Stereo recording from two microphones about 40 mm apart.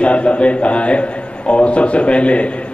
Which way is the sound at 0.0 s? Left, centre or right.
Left.